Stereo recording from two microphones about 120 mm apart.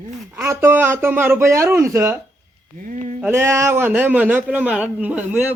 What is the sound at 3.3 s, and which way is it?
Speech, 25° right (ahead or behind).